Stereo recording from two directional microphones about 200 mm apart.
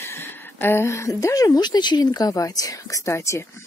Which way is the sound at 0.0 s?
10° left (ahead or behind).